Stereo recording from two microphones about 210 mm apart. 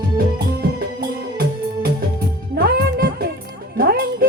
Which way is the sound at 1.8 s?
45° right (ahead or behind).